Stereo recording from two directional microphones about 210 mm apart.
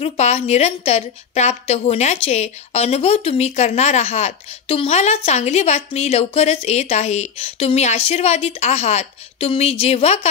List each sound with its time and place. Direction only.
0.0 s a woman's voice: 30° left (ahead or behind)